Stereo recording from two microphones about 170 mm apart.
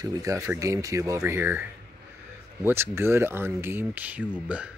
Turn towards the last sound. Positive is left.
turn(degrees=-10)  # may be behind; listen again after turning